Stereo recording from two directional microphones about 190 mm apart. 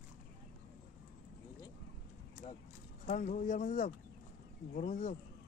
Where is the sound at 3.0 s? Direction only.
40° left (ahead or behind).